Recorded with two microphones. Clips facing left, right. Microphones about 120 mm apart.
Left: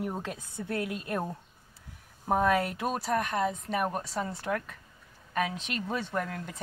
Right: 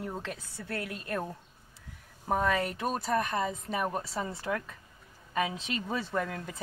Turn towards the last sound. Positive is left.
turn(degrees=-5)  # may be behind; listen again after turning